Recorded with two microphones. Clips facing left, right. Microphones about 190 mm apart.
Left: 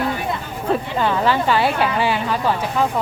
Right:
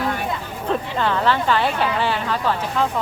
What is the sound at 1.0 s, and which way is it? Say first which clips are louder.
Speech: left 1 dB; 10° left (ahead or behind).